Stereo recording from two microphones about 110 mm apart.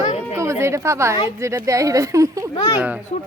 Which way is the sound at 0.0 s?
80° left.